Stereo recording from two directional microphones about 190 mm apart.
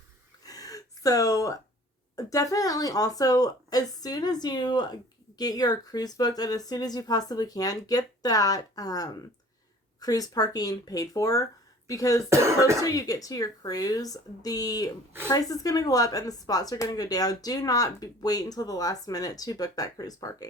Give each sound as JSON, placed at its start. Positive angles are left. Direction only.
{"t": 0.4, "sound": "gasp", "side_deg": 20}
{"t": 2.1, "sound": "speech", "side_deg": 20}
{"t": 12.3, "sound": "speech", "side_deg": -15}
{"t": 12.8, "sound": "speech", "side_deg": 20}